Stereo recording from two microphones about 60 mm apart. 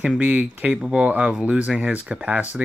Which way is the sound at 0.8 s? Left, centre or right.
Centre.